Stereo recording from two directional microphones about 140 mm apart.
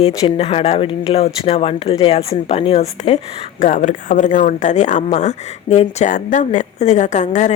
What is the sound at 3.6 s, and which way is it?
Speech, 60° left (ahead or behind).